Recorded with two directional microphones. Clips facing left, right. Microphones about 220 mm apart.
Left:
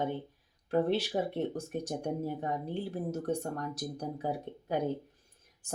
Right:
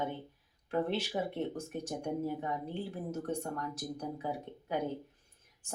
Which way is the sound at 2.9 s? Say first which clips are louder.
Left 5 dB; 35° left (ahead or behind).